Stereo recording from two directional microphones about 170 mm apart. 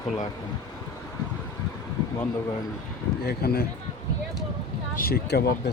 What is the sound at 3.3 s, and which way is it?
Speech, 65° left (ahead or behind).